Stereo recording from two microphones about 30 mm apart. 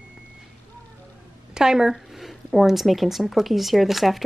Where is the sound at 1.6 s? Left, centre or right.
Centre.